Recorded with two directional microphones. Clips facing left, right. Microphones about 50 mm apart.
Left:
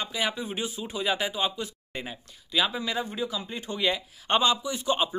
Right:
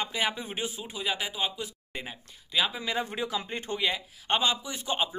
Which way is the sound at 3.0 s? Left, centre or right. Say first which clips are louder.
Even; right.